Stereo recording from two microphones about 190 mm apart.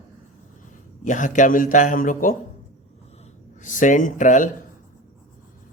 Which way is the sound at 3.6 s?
40° left (ahead or behind).